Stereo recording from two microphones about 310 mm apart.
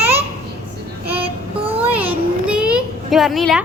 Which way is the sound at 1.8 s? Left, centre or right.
Centre.